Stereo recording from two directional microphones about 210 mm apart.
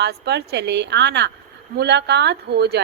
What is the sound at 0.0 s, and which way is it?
Speech, 50° right (ahead or behind).